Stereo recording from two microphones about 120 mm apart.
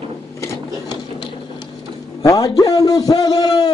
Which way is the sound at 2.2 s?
30° left (ahead or behind).